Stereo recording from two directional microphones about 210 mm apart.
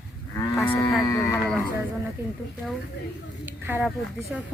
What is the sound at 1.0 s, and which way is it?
Speech, 15° left (ahead or behind).